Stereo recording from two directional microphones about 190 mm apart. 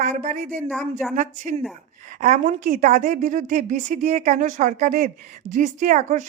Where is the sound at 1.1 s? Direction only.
40° right (ahead or behind).